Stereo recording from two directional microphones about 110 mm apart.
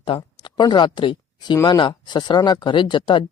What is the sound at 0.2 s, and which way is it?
Speech, 40° left (ahead or behind).